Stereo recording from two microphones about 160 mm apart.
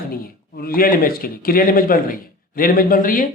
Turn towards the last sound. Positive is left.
turn(degrees=60)  # may be behind; listen again after turning